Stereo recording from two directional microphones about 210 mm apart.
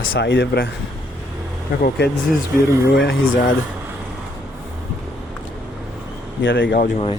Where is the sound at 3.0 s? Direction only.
60° left (ahead or behind).